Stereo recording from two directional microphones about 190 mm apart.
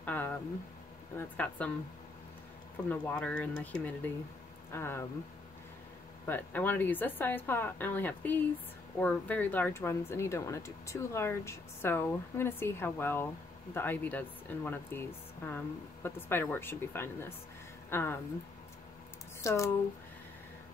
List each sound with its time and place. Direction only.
0.0 s a sound: 10° left (ahead or behind)
1.1 s speech: 10° left (ahead or behind)
2.9 s speech: 10° left (ahead or behind)
6.2 s speech: 10° left (ahead or behind)
19.4 s speech: 15° left (ahead or behind)